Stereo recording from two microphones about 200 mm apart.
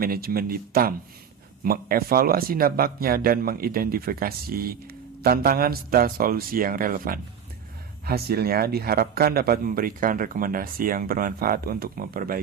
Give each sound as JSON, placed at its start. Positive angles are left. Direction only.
{"t": 0.0, "sound": "a man's voice", "side_deg": -45}